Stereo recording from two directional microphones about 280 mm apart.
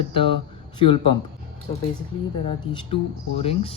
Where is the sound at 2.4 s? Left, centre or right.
Centre.